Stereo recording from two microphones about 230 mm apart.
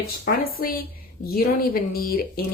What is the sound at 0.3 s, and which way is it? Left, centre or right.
Speech, left.